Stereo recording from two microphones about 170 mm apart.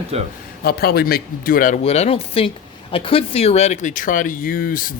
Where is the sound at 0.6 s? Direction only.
65° left (ahead or behind).